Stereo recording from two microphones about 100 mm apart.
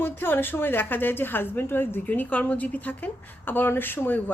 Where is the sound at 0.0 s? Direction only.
20° left (ahead or behind).